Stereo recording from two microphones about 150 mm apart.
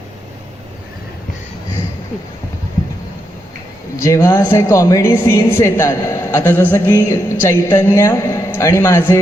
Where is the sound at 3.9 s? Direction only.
20° left (ahead or behind).